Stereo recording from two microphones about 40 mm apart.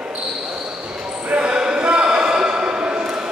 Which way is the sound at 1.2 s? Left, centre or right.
Right.